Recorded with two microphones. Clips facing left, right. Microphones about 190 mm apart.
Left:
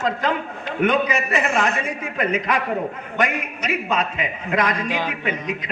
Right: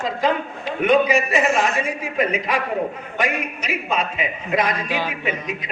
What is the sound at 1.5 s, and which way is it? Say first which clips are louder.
Speech: right 1 dB; 60° left (ahead or behind).